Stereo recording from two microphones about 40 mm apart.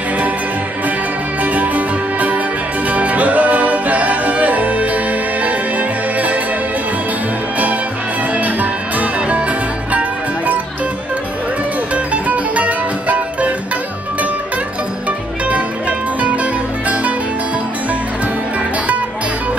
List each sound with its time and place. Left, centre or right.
1.4 s music: right
9.9 s music: right
11.9 s music: right